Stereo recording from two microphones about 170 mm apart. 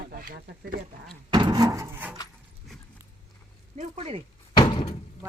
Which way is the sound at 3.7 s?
35° right (ahead or behind).